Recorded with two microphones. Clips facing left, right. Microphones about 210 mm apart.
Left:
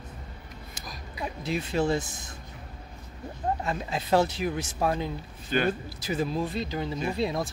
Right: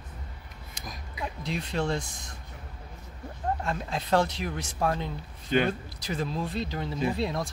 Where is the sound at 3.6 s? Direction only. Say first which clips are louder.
Left 1 dB; 5° left (ahead or behind).